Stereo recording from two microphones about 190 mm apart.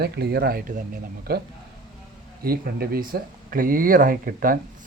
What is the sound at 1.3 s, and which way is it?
Speech, 55° right (ahead or behind).